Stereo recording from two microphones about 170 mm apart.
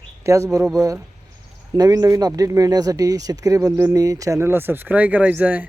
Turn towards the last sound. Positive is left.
turn(degrees=-10)  # may be behind; listen again after turning